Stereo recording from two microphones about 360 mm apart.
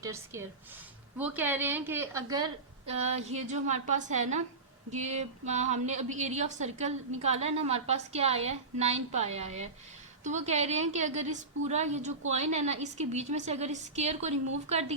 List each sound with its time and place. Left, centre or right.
0.0 s a woman's voice: centre